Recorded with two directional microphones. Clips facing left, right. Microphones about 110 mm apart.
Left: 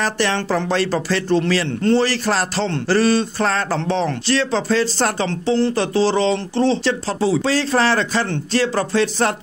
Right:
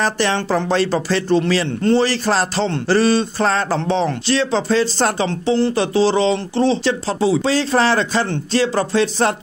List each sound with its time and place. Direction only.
0.0 s speech: 25° right (ahead or behind)